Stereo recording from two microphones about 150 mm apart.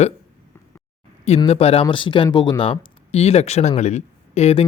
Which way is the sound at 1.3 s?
40° left (ahead or behind).